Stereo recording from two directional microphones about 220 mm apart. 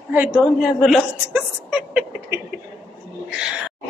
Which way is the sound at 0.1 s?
5° right (ahead or behind).